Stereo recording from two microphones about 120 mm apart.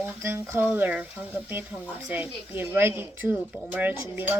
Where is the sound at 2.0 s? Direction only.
15° right (ahead or behind).